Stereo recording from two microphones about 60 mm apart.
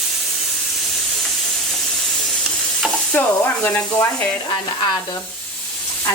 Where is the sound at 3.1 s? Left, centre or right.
Left.